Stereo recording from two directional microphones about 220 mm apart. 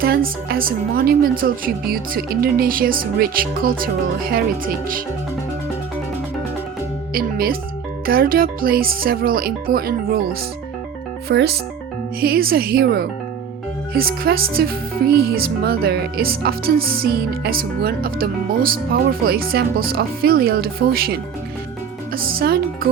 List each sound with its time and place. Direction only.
0.0 s speech: 45° right (ahead or behind)
7.1 s speech: 40° right (ahead or behind)
11.3 s speech: 45° right (ahead or behind)